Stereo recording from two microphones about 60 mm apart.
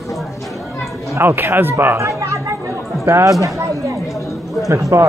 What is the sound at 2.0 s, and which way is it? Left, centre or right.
Chatter, right.